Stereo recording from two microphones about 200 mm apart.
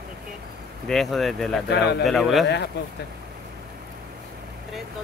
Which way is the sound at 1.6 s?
55° left (ahead or behind).